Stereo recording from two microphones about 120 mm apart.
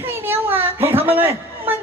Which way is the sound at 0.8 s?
20° right (ahead or behind).